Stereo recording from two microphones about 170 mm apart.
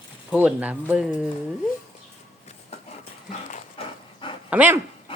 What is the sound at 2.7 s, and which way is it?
Dog, 40° left (ahead or behind).